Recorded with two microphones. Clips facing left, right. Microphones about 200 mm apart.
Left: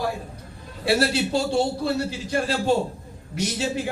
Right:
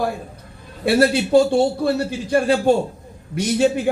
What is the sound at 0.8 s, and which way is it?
A man's voice, 55° right (ahead or behind).